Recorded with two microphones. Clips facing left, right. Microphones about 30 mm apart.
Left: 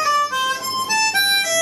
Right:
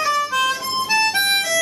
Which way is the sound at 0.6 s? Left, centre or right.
Right.